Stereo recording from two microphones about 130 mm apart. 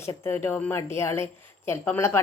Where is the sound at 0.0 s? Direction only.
20° left (ahead or behind).